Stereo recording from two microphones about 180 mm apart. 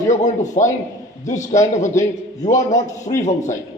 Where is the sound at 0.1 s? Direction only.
45° left (ahead or behind).